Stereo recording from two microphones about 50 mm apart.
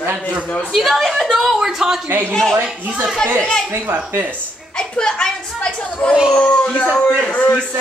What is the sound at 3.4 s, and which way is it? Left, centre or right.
Speech, left.